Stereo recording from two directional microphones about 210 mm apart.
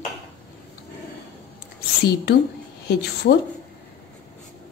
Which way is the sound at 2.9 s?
50° left (ahead or behind).